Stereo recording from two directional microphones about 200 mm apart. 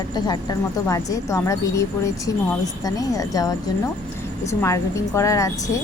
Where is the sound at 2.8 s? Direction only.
15° left (ahead or behind).